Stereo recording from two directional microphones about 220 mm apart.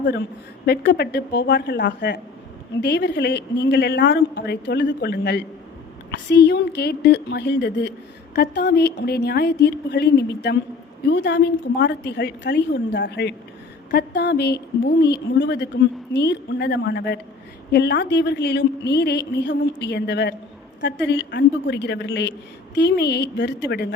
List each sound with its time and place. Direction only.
0.0 s a woman's voice: 50° left (ahead or behind)